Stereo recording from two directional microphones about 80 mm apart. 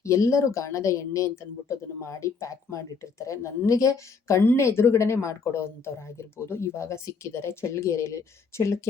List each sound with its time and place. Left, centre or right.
0.0 s speech: left